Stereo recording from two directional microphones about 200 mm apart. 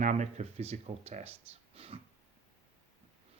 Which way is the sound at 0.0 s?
35° right (ahead or behind).